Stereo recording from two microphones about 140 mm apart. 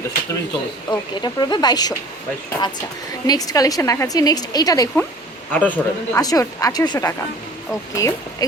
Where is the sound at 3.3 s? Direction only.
25° left (ahead or behind).